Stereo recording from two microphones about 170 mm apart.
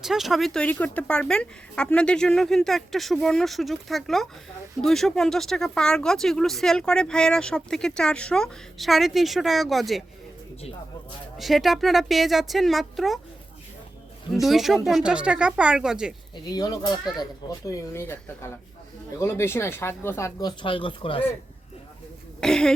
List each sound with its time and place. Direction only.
0.0 s speech: centre (ahead or behind)
11.3 s speech: centre (ahead or behind)
14.3 s speech: centre (ahead or behind)
16.3 s speech: 20° left (ahead or behind)
20.6 s speech: 30° left (ahead or behind)
22.4 s speech: 5° left (ahead or behind)